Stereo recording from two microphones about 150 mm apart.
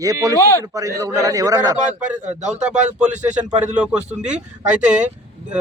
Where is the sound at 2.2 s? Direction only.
50° right (ahead or behind).